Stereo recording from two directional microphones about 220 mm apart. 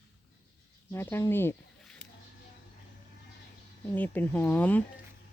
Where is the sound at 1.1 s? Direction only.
10° left (ahead or behind).